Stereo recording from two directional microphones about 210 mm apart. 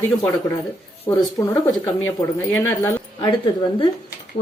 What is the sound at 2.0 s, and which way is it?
Speech, 10° left (ahead or behind).